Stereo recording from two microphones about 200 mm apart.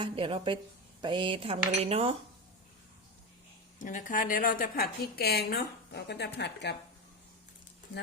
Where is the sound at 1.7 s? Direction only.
30° right (ahead or behind).